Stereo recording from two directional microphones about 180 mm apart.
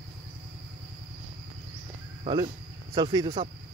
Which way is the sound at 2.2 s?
30° right (ahead or behind).